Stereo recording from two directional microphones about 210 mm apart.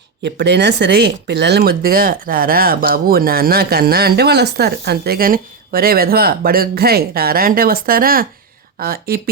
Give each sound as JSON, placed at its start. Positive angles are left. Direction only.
{"t": 0.2, "sound": "speech", "side_deg": -55}